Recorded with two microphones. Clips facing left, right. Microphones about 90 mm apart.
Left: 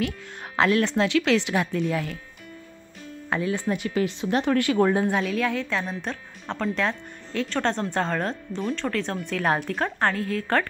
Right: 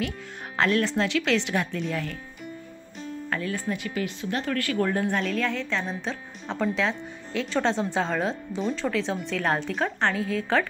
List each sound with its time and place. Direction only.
0.6 s a woman's voice: 5° left (ahead or behind)
3.3 s speech: 20° left (ahead or behind)
3.6 s a woman's voice: 30° left (ahead or behind); by 10.7 s centre (ahead or behind)